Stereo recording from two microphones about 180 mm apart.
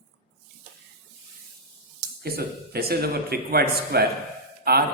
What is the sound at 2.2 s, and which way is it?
Speech, 60° right (ahead or behind).